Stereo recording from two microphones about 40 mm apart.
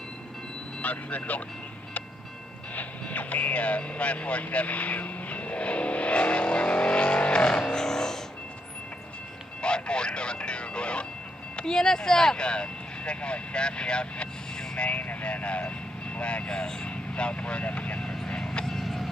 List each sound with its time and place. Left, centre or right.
0.8 s speech: left
2.7 s vehicle: left
7.7 s music: centre
9.6 s vehicle: left
11.5 s speech: centre
18.3 s vehicle: left
18.7 s vehicle: centre